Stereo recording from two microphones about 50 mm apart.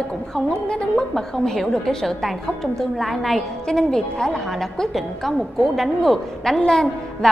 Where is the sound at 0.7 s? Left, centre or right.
Centre.